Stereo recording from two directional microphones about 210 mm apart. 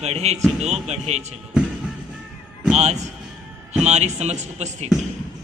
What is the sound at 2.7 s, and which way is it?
A man's voice, 30° right (ahead or behind).